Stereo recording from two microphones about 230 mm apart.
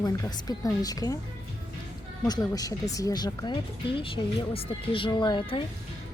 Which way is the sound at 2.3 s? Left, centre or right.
Centre.